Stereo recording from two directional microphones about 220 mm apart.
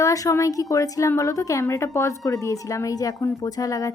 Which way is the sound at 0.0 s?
15° left (ahead or behind).